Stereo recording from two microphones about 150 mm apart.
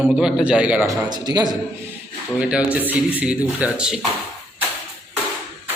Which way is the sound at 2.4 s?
10° right (ahead or behind).